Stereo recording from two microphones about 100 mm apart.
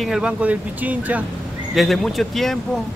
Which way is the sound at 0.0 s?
5° right (ahead or behind).